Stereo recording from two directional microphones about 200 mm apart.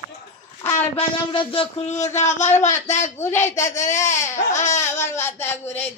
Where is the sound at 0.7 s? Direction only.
25° left (ahead or behind).